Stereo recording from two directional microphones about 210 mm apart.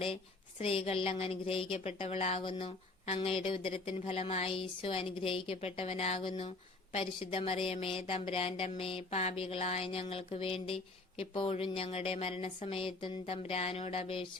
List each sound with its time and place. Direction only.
0.6 s a woman's voice: 25° left (ahead or behind)